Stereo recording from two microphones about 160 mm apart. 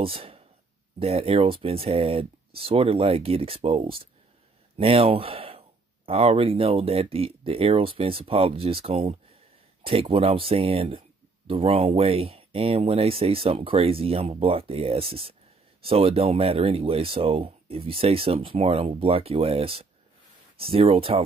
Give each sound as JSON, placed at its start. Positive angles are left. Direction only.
{"t": 0.0, "sound": "speech", "side_deg": -35}